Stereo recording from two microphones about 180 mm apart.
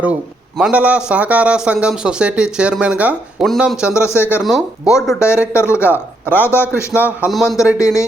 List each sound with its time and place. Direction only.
0.6 s a man's voice: 5° right (ahead or behind)
4.2 s a man's voice: 10° left (ahead or behind)
4.4 s a man's voice: centre (ahead or behind)
5.5 s a man's voice: 15° left (ahead or behind)
5.8 s speech: 10° right (ahead or behind)
6.3 s a man's voice: 10° left (ahead or behind)
7.2 s a man's voice: centre (ahead or behind)
7.8 s a man's voice: 15° left (ahead or behind)